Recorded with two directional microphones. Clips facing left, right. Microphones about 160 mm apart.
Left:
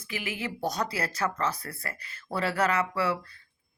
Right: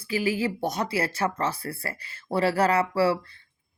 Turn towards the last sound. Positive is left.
turn(degrees=-35)  # may be behind; listen again after turning